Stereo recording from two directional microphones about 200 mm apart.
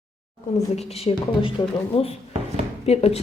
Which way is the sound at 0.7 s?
30° left (ahead or behind).